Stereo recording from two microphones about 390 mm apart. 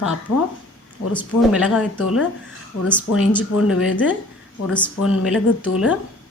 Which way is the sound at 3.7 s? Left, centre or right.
Left.